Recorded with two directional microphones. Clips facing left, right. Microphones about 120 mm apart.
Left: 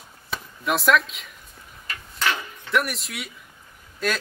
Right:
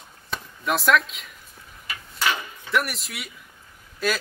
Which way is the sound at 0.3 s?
Centre (ahead or behind).